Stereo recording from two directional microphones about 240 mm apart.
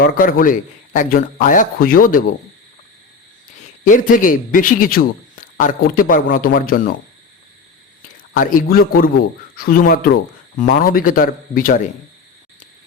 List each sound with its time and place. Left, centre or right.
0.0 s a man's voice: left
3.8 s a man's voice: left
8.3 s a man's voice: left